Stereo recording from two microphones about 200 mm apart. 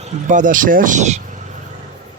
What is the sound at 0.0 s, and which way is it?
Speech, 35° right (ahead or behind).